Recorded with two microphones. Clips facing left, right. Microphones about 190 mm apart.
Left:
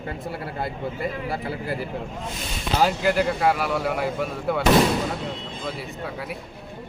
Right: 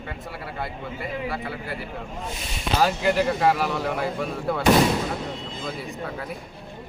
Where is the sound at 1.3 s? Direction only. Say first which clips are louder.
Left 3 dB; 40° left (ahead or behind).